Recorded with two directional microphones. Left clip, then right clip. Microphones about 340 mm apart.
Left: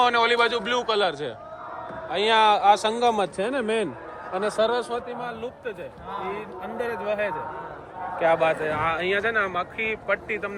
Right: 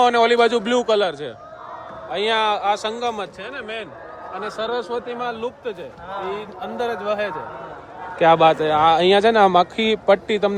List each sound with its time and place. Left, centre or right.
0.0 s speech: centre
4.4 s speech: centre